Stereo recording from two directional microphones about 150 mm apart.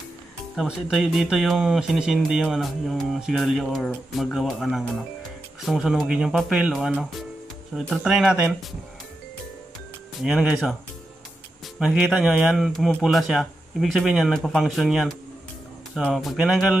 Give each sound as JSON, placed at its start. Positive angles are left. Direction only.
{"t": 0.6, "sound": "speech", "side_deg": -5}
{"t": 10.2, "sound": "speech", "side_deg": -5}
{"t": 11.8, "sound": "speech", "side_deg": -5}